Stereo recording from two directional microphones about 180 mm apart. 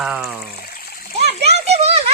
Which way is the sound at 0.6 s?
55° left (ahead or behind).